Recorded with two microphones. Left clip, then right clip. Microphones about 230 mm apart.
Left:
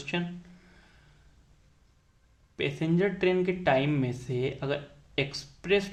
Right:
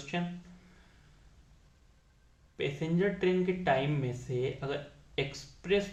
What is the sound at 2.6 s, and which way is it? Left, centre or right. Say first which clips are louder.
Speech: left 4 dB; left.